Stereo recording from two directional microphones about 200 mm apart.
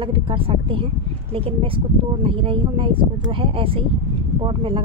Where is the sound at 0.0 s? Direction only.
25° right (ahead or behind).